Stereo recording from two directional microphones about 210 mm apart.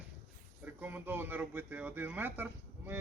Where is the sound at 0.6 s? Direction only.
10° right (ahead or behind).